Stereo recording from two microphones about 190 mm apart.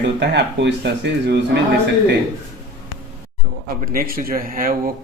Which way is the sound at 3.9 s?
50° right (ahead or behind).